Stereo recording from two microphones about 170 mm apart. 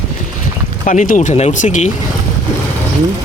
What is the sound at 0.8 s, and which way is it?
Speech, 50° left (ahead or behind).